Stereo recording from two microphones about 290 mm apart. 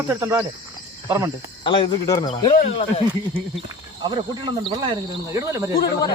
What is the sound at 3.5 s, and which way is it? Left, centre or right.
Speech, centre.